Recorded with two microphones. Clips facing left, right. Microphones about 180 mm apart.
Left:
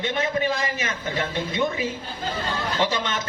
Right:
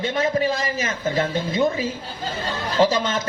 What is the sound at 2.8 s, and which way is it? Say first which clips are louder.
Speech: right 8 dB; 35° right (ahead or behind).